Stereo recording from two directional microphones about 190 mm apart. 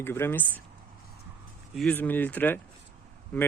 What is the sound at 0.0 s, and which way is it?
Speech, 10° left (ahead or behind).